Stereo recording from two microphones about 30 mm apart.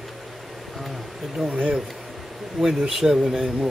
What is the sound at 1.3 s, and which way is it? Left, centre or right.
Speech, right.